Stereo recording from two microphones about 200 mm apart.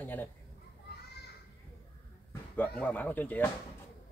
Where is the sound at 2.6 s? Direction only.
5° left (ahead or behind).